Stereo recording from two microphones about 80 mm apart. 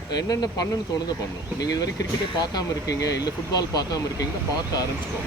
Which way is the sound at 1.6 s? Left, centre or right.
Left.